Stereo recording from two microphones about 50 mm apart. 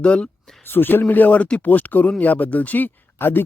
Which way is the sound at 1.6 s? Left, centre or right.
Left.